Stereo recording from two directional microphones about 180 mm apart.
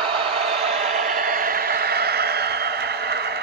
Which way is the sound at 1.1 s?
55° right (ahead or behind).